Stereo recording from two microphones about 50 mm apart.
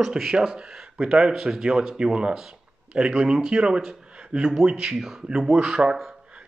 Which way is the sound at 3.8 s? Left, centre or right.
Centre.